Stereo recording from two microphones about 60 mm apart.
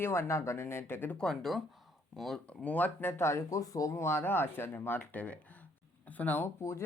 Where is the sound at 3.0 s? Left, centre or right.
Left.